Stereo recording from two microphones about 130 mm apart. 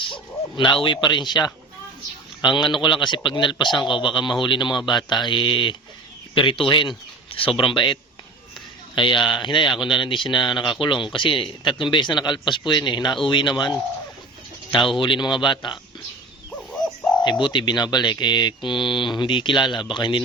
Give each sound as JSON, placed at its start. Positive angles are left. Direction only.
{"t": 0.1, "sound": "speech", "side_deg": 35}
{"t": 9.0, "sound": "speech", "side_deg": 35}
{"t": 14.9, "sound": "speech", "side_deg": 40}
{"t": 16.5, "sound": "bird", "side_deg": 10}
{"t": 17.2, "sound": "speech", "side_deg": 35}